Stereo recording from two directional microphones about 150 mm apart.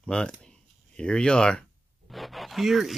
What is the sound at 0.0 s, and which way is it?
Speech, 5° left (ahead or behind).